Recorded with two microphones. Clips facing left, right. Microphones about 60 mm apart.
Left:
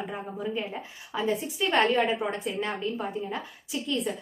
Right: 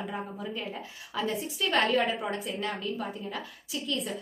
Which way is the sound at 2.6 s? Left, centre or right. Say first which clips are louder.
Left 3 dB; left.